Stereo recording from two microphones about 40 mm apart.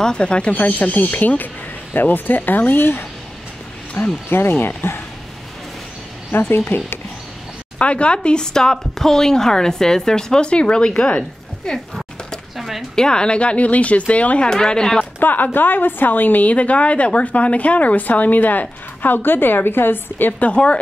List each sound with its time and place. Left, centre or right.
0.0 s speech: left
0.6 s speech: left
4.0 s speech: left
4.3 s speech: left
6.5 s speech: left
7.8 s a woman's voice: left
12.5 s a sound: centre
12.9 s speech: centre
14.4 s a woman's voice: centre
15.1 s speech: left
16.5 s speech: left
20.3 s speech: left